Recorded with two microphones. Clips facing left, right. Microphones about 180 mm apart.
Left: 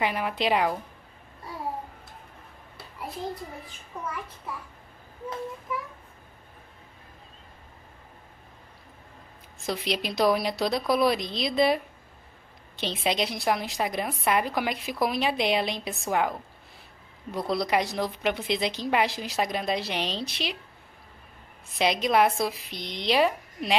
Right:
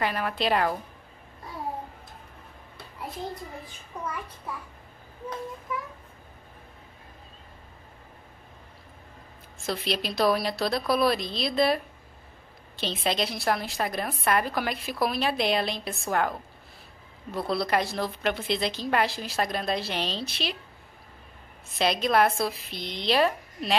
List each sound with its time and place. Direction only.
0.0 s a woman's voice: 15° left (ahead or behind)
9.6 s a woman's voice: 15° left (ahead or behind)
21.7 s a woman's voice: 15° left (ahead or behind)